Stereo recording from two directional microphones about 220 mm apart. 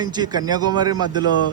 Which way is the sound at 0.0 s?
20° right (ahead or behind).